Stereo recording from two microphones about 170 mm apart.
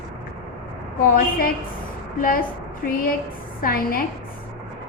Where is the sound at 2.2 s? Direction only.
55° left (ahead or behind).